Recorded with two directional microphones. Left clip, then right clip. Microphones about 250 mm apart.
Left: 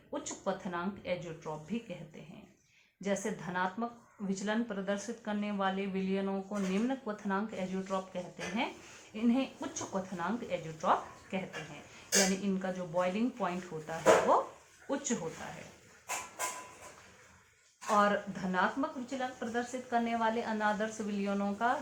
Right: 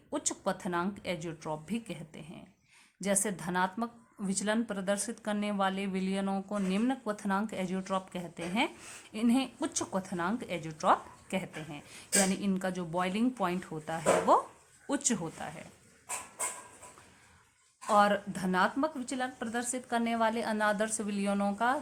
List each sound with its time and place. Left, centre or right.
0.1 s speech: right
3.0 s speech: right
12.4 s speech: right
17.9 s speech: right